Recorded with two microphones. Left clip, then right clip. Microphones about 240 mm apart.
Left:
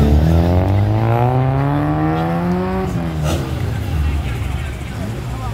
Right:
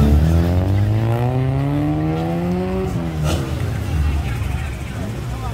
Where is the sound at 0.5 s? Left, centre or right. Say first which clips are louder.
Left 5 dB; left.